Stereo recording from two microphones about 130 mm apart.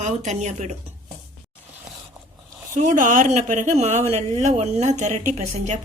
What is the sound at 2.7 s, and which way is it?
Speech, 80° right.